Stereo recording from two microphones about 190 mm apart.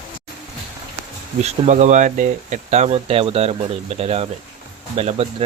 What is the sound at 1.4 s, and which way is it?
Speech, 40° right (ahead or behind).